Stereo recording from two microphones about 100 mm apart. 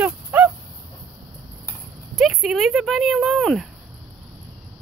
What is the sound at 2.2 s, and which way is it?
Speech, centre (ahead or behind).